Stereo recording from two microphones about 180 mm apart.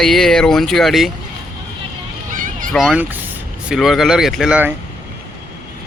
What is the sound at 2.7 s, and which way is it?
Speech, 5° right (ahead or behind).